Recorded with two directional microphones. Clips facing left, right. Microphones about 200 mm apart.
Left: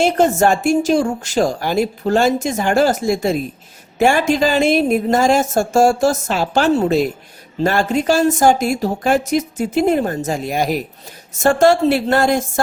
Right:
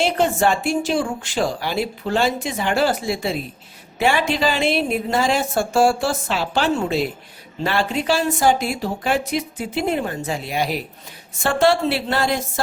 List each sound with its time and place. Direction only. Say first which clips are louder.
0.0 s speech: left 4 dB; 45° left (ahead or behind)